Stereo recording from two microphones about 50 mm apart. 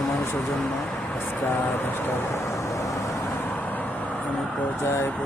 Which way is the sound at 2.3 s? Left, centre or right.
Left.